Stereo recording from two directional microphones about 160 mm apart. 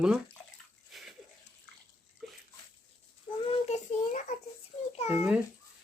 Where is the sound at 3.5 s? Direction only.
45° left (ahead or behind).